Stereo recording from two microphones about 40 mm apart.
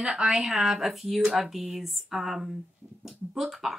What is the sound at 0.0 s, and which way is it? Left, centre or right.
Speech, centre.